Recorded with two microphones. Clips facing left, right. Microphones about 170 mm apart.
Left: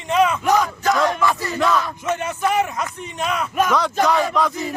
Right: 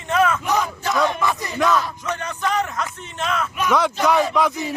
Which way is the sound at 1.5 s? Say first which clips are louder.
Even; 5° left (ahead or behind).